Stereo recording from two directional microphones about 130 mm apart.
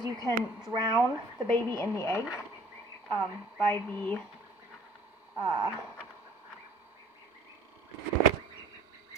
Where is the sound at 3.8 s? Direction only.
10° left (ahead or behind).